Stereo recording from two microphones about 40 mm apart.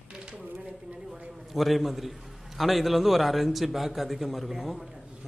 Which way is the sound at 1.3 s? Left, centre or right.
Centre.